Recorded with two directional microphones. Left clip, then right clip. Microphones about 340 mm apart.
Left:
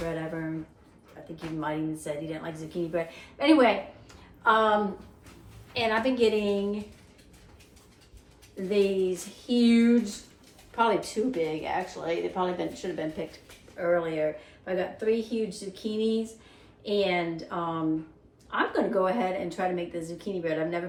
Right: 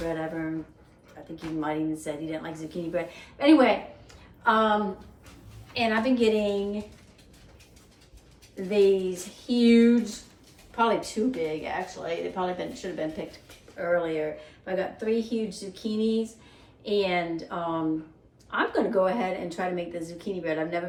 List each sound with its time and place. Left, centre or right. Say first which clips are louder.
0.0 s a sound: right 2 dB; centre
1.4 s speech: right 2 dB; centre
4.4 s a woman's voice: even; centre
5.7 s a woman's voice: right 1 dB; centre
8.7 s speech: right 3 dB; centre